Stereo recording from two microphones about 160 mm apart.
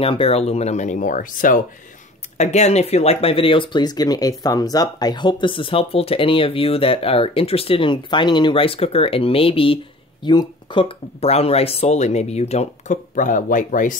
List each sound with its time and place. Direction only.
0.0 s speech: 35° left (ahead or behind); by 1.6 s 55° left (ahead or behind)
2.3 s speech: 45° left (ahead or behind)